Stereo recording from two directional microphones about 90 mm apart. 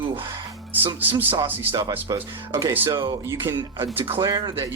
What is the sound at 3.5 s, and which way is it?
Speech, 30° right (ahead or behind).